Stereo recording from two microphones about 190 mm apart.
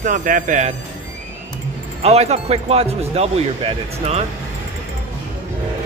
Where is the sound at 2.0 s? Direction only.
35° right (ahead or behind).